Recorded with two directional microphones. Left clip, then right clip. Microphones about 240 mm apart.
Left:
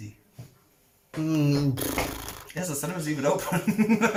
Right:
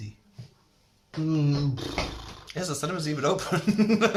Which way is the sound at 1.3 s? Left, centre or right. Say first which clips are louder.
Left 3 dB; left.